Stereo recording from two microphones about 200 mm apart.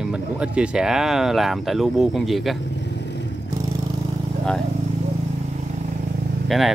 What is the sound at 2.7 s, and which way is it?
Vehicle, 60° left (ahead or behind).